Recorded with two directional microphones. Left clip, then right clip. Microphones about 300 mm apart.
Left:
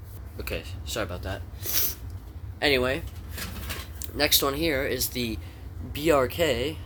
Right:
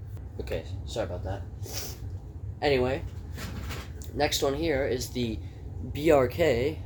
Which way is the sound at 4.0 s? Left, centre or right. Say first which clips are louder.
Left 3 dB; left.